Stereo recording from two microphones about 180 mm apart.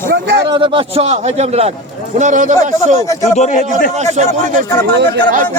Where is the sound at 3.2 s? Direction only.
40° left (ahead or behind).